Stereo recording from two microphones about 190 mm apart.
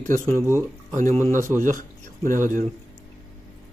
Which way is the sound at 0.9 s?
40° right (ahead or behind).